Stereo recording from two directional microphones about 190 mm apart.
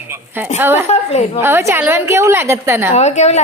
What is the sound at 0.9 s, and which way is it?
Speech, 35° left (ahead or behind).